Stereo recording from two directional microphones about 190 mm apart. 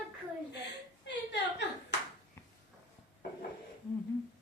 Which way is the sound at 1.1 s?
65° left (ahead or behind).